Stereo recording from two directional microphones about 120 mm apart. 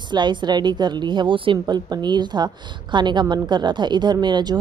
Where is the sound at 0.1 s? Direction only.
40° right (ahead or behind).